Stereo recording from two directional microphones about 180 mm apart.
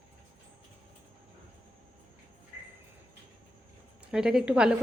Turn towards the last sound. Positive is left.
turn(degrees=-5)  # may be behind; listen again after turning